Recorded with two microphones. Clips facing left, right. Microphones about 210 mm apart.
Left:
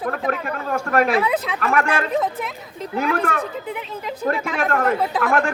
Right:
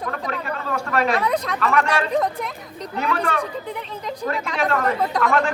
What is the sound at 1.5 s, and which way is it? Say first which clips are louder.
Speech: even; 50° left (ahead or behind).